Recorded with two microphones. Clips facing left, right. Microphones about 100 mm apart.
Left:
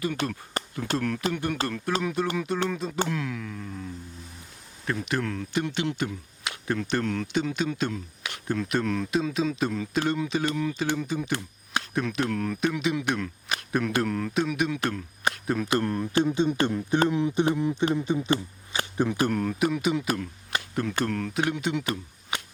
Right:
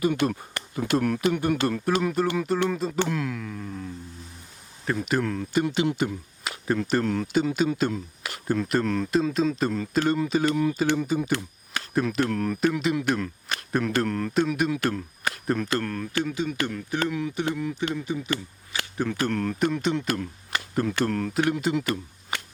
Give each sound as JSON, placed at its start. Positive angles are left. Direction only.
{"t": 0.2, "sound": "speech", "side_deg": -15}
{"t": 15.7, "sound": "speech", "side_deg": 20}